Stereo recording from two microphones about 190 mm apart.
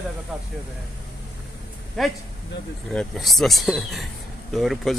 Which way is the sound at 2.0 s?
Centre (ahead or behind).